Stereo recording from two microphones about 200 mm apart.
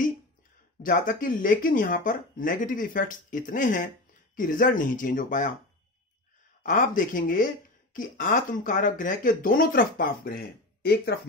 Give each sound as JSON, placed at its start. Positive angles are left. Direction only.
{"t": 0.8, "sound": "speech", "side_deg": 40}
{"t": 6.6, "sound": "speech", "side_deg": 40}